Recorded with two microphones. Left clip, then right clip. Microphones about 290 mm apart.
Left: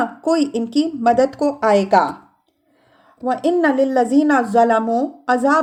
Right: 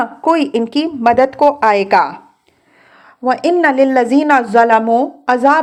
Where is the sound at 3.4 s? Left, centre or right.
Centre.